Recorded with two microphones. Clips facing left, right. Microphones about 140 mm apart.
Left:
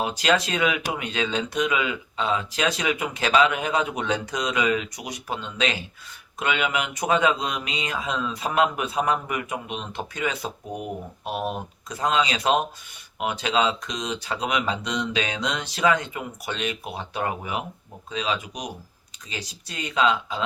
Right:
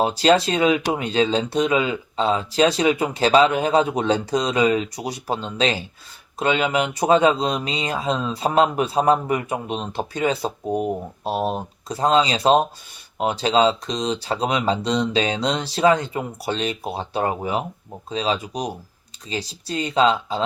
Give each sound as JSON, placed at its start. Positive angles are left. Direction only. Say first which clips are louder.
{"t": 0.0, "sound": "speech", "louder": "right 6 dB", "side_deg": -30}